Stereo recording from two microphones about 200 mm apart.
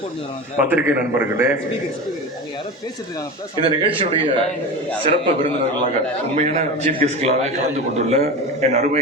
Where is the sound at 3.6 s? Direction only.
25° right (ahead or behind).